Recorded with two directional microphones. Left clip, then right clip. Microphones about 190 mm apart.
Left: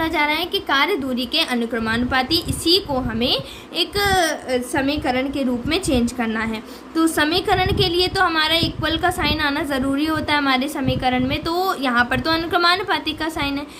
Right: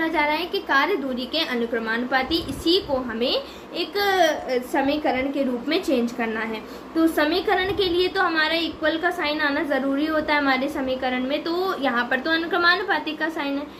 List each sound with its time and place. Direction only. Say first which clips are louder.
0.0 s a woman's voice: left 2 dB; 45° left (ahead or behind)